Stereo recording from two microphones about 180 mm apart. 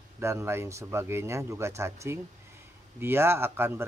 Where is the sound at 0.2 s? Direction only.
15° right (ahead or behind).